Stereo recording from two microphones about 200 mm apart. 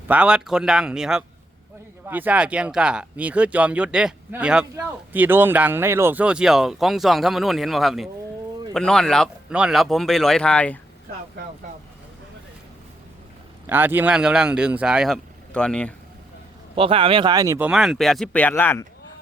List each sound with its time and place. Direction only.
0.1 s speech: 5° right (ahead or behind)
13.7 s speech: 10° right (ahead or behind)
16.7 s speech: 25° right (ahead or behind)
17.7 s speech: centre (ahead or behind)